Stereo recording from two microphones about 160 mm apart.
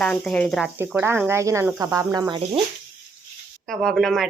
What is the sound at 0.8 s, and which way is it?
Speech, 15° right (ahead or behind).